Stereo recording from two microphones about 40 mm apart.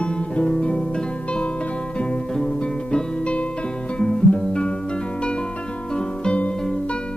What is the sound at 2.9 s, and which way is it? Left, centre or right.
Music, left.